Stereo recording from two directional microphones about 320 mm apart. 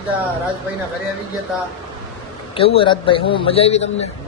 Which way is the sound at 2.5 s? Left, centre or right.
Centre.